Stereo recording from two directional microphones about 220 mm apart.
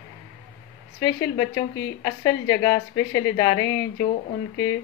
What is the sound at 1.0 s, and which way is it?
A woman's voice, 15° left (ahead or behind).